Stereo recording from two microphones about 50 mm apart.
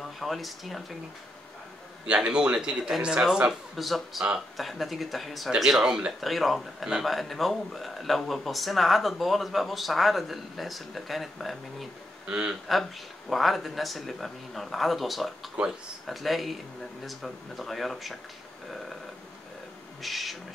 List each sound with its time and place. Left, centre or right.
0.2 s speech: centre
2.0 s a man's voice: right
3.7 s speech: centre
12.3 s a man's voice: right
13.3 s speech: centre
20.0 s speech: centre